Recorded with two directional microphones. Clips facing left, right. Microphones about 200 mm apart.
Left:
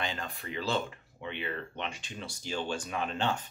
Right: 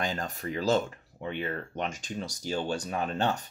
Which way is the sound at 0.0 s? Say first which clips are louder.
Right 5 dB; 45° right (ahead or behind).